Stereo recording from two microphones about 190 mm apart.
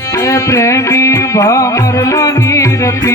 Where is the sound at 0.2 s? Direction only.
15° left (ahead or behind).